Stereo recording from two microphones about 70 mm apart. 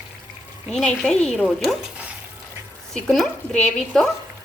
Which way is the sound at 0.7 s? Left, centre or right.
Centre.